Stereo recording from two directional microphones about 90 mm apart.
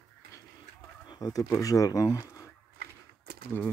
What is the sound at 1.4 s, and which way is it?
Speech, 40° left (ahead or behind).